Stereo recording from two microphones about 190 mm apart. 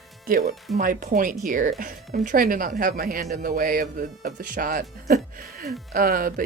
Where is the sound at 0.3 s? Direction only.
45° right (ahead or behind).